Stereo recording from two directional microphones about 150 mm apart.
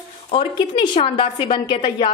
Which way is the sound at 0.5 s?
30° left (ahead or behind).